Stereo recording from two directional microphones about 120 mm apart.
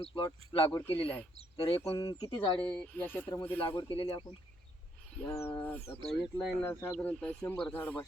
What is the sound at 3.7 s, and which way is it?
Speech, 45° left (ahead or behind).